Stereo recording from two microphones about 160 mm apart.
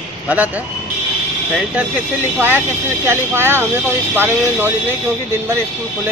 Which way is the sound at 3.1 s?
15° right (ahead or behind).